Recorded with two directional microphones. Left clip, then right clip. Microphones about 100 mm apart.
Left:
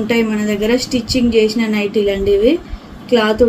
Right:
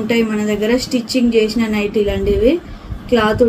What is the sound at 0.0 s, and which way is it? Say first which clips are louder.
Speech: left 1 dB; centre (ahead or behind).